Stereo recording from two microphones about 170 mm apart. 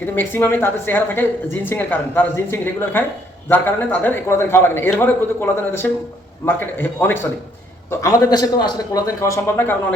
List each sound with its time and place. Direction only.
0.0 s a woman's voice: 10° left (ahead or behind)